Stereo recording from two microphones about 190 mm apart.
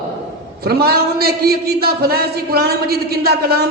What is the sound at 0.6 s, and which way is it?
A man's voice, 55° right (ahead or behind).